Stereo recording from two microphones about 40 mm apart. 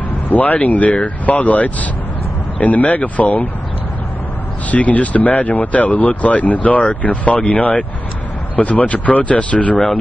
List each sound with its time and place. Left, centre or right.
0.3 s speech: left
4.6 s speech: left